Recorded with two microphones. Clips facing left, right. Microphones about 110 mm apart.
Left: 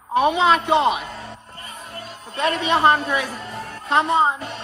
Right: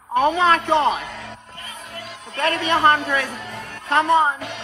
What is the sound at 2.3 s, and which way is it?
A man's voice, 20° left (ahead or behind).